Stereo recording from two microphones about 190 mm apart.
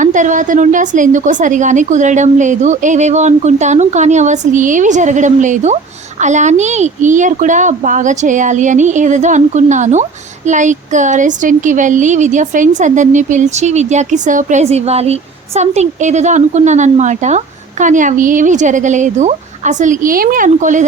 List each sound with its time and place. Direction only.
0.0 s speech: 40° right (ahead or behind)